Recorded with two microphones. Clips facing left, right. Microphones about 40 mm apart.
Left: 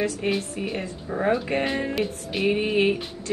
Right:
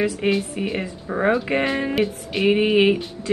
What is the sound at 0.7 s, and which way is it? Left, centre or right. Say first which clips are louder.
Speech: right 3 dB; right.